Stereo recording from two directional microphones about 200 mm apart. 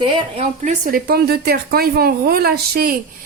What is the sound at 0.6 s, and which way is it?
Speech, 45° right (ahead or behind).